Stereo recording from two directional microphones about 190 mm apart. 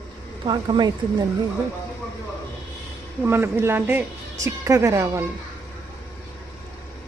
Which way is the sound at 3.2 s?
15° right (ahead or behind).